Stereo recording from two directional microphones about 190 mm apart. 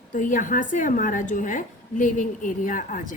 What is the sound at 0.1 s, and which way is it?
A woman's voice, 45° left (ahead or behind).